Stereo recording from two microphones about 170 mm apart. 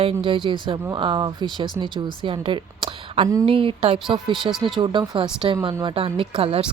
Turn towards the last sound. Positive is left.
turn(degrees=-35)  # may be behind; listen again after turning